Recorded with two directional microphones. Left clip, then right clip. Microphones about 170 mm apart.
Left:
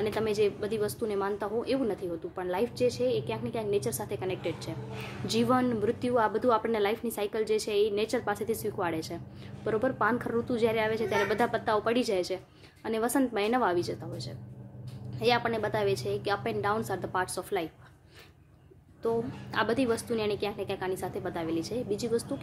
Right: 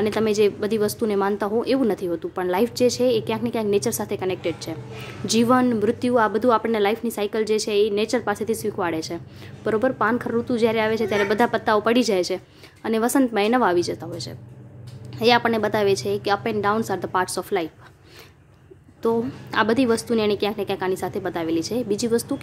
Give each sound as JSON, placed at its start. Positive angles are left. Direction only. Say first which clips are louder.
{"t": 0.0, "sound": "a woman's voice", "louder": "right 8 dB", "side_deg": -30}
{"t": 19.0, "sound": "a woman's voice", "louder": "right 8 dB", "side_deg": -30}